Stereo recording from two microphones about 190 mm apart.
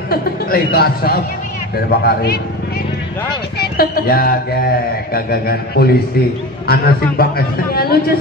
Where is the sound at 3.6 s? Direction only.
50° left (ahead or behind).